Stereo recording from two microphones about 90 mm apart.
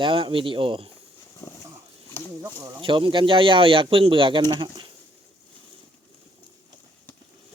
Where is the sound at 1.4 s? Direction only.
30° left (ahead or behind).